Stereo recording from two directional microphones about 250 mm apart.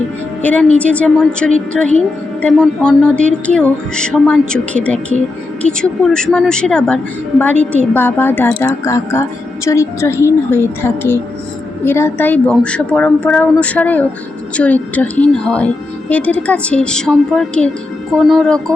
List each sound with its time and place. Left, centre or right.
0.8 s a woman's voice: centre